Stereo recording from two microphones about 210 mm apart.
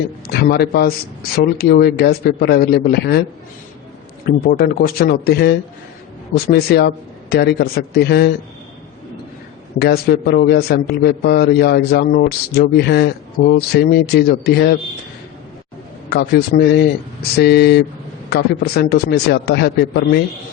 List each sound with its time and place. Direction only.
0.3 s a man's voice: 50° left (ahead or behind)
4.3 s a man's voice: 45° left (ahead or behind)
9.7 s a man's voice: 50° left (ahead or behind)
16.0 s a man's voice: 50° left (ahead or behind)